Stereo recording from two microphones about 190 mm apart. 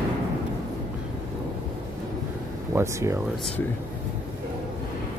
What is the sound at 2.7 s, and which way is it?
Speech, 15° right (ahead or behind).